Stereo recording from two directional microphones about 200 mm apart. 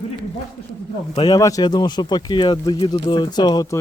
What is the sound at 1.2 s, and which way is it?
A man's voice, 20° left (ahead or behind).